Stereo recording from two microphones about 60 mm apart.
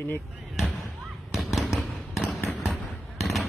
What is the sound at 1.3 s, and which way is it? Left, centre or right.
Fireworks, centre.